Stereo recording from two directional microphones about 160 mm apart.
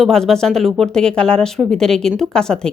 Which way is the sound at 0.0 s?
Centre (ahead or behind).